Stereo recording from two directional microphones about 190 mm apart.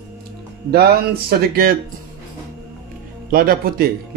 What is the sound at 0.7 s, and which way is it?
Speech, 55° right (ahead or behind).